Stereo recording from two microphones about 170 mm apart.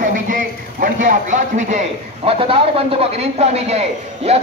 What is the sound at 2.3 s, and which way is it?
A man's voice, 35° right (ahead or behind).